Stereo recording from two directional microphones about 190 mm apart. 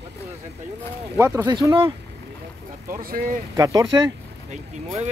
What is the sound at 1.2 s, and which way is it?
Speech, 15° right (ahead or behind).